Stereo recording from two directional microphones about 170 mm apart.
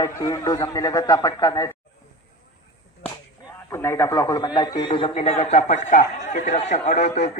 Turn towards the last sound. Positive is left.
turn(degrees=40)  # may be behind; listen again after turning